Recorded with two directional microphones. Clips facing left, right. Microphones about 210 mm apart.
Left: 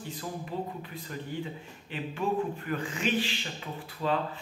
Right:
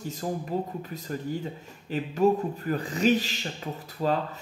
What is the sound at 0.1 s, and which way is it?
Speech, 45° right (ahead or behind).